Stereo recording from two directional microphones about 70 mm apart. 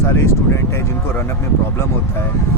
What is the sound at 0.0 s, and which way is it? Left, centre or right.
Speech, left.